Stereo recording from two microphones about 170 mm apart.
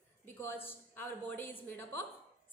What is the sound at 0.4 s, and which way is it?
A woman's voice, 15° left (ahead or behind).